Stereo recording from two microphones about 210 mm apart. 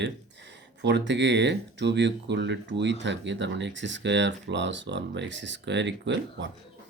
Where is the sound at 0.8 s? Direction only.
55° right (ahead or behind).